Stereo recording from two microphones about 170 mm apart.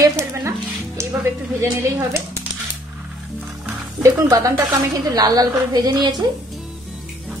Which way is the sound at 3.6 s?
20° right (ahead or behind).